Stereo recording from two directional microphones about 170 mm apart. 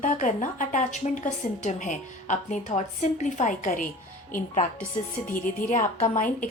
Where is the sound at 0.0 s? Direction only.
50° left (ahead or behind).